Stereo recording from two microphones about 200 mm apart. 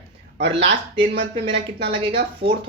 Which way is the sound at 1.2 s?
25° right (ahead or behind).